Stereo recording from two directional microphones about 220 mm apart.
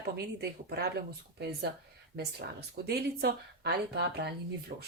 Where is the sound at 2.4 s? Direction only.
45° right (ahead or behind).